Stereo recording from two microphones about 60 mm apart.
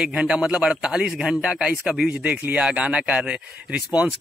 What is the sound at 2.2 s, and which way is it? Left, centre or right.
Speech, right.